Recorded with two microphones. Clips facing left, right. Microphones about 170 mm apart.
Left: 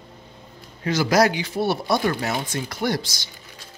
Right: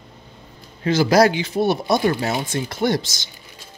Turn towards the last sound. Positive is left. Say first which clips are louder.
# right 4 dB
turn(degrees=-25)  # may be behind; listen again after turning